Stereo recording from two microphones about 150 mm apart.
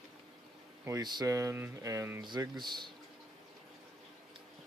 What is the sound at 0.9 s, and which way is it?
Speech, 25° right (ahead or behind).